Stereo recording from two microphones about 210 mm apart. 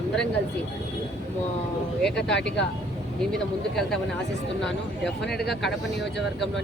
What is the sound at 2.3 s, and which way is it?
Speech, 55° left (ahead or behind).